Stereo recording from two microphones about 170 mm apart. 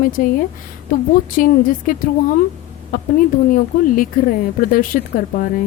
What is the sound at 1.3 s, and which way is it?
Speech, 55° left (ahead or behind).